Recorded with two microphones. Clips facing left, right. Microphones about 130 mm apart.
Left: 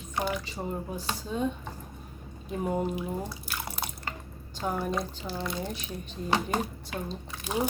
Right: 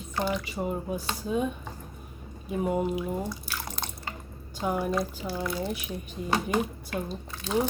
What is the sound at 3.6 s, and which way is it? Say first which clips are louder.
Drip: left 1 dB; 10° left (ahead or behind).